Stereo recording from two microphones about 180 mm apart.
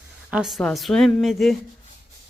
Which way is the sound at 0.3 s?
5° right (ahead or behind).